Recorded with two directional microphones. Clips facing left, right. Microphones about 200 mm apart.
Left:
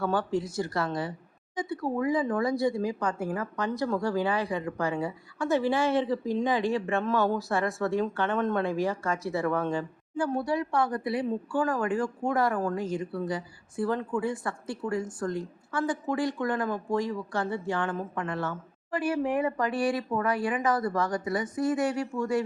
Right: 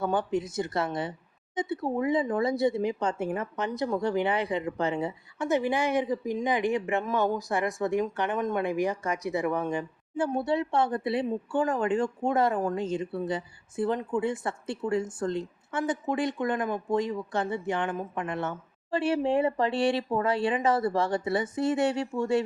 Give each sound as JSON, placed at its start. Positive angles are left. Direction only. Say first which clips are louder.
{"t": 0.0, "sound": "speech", "louder": "even", "side_deg": -20}